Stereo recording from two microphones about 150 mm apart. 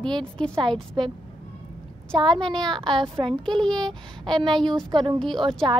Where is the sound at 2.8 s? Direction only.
30° right (ahead or behind).